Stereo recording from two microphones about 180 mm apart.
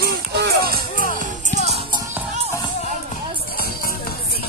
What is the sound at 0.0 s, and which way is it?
Music, 65° right (ahead or behind).